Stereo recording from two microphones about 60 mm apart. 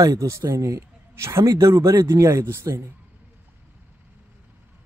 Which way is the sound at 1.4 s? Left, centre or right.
Right.